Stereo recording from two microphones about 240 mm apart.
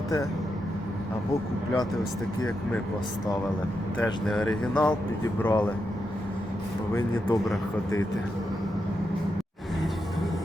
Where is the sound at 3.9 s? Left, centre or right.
Centre.